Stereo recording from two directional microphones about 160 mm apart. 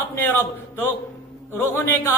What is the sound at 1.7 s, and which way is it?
Speech, 15° left (ahead or behind).